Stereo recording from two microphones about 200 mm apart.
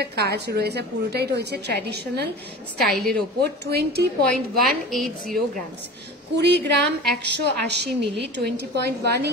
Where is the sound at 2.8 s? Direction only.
Centre (ahead or behind).